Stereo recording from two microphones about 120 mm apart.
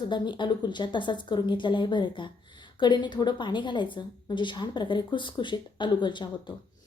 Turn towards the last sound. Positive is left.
turn(degrees=40)  # may be behind; listen again after turning